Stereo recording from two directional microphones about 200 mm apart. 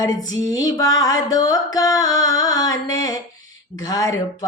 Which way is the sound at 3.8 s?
20° left (ahead or behind).